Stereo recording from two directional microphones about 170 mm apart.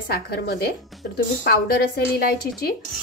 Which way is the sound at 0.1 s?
65° left (ahead or behind).